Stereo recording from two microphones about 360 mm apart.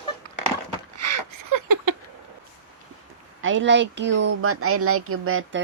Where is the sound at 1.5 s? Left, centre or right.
Right.